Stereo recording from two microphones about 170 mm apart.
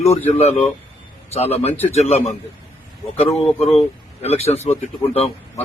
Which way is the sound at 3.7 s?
40° left (ahead or behind).